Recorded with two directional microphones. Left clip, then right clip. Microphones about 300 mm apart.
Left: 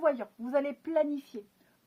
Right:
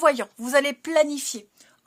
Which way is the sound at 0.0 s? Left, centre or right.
Right.